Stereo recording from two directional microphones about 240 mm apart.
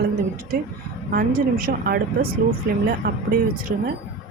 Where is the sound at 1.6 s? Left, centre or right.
Right.